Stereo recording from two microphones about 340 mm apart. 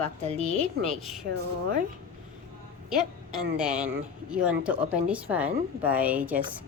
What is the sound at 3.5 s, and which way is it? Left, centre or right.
A woman's voice, centre.